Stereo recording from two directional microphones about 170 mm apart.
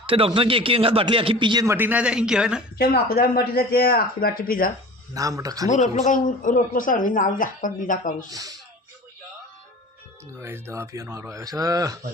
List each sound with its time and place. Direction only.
0.0 s speech: 30° right (ahead or behind)
1.7 s speech: 10° right (ahead or behind)
2.7 s speech: 65° left (ahead or behind)
5.1 s speech: 20° right (ahead or behind)
5.6 s speech: 45° left (ahead or behind)
8.3 s speech: 20° right (ahead or behind)
10.4 s speech: 15° right (ahead or behind)